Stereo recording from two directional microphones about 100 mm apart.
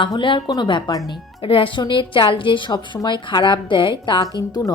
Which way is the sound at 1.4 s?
60° left (ahead or behind).